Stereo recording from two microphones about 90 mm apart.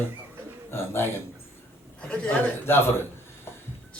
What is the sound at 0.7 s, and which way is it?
Speech, 25° left (ahead or behind).